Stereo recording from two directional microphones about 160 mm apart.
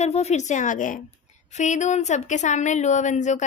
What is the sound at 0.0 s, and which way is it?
A woman's voice, 40° left (ahead or behind).